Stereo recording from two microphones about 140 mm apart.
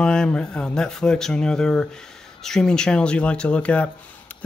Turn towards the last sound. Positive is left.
turn(degrees=10)  # may be behind; listen again after turning